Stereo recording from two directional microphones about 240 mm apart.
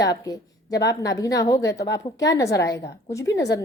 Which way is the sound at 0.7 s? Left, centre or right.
Left.